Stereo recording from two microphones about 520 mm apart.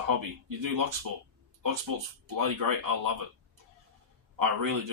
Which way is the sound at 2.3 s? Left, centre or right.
Right.